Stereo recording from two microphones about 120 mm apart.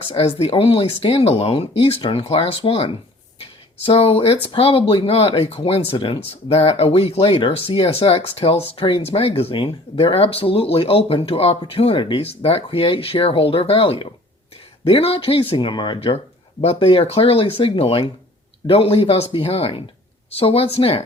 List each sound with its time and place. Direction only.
0.1 s speech: 50° left (ahead or behind)